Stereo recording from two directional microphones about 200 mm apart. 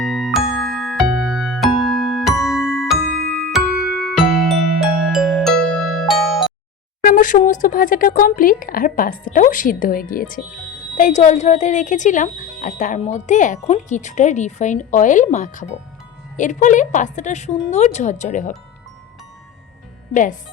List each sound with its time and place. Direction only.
0.0 s music: centre (ahead or behind)
7.0 s speech: 45° left (ahead or behind)